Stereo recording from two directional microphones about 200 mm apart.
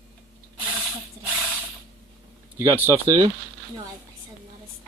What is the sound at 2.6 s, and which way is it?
Speech, 15° right (ahead or behind).